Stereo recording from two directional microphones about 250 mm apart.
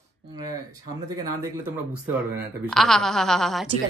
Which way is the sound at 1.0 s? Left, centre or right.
Centre.